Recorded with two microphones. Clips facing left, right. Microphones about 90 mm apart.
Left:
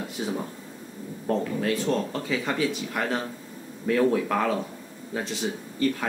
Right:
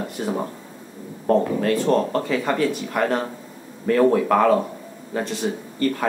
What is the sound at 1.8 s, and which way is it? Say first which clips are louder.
Speech: right 7 dB; 60° right (ahead or behind).